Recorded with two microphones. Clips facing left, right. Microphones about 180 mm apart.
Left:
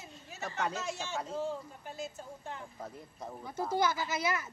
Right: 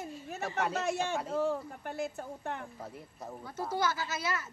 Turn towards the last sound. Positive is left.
turn(degrees=15)  # may be behind; listen again after turning